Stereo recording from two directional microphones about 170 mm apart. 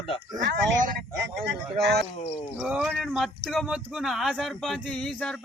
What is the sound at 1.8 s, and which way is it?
Speech, 75° right (ahead or behind).